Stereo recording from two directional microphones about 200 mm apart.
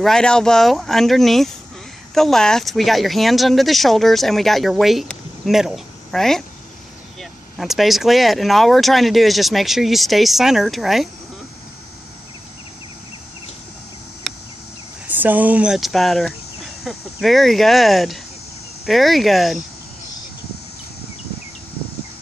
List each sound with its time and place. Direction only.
0.0 s speech: 5° left (ahead or behind)
14.3 s a sound: centre (ahead or behind)
15.0 s speech: 10° right (ahead or behind)